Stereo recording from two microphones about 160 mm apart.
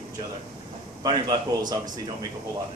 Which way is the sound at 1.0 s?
30° right (ahead or behind).